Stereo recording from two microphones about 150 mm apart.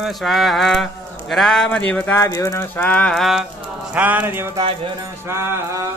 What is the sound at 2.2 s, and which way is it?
Speech, 20° left (ahead or behind).